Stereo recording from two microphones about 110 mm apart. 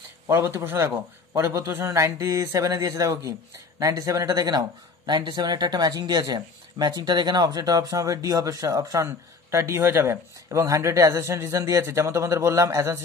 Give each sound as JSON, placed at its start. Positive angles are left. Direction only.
{"t": 0.3, "sound": "speech", "side_deg": -25}